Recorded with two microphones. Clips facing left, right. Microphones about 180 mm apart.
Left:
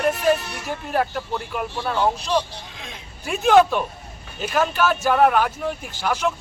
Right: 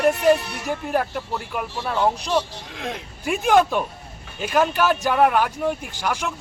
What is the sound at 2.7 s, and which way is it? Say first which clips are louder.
Speech: right 14 dB; 65° right (ahead or behind).